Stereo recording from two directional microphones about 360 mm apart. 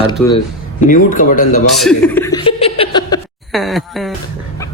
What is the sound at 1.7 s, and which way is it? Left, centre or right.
Chuckle, centre.